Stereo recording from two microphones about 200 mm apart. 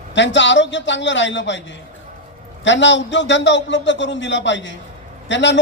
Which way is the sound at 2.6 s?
65° left (ahead or behind).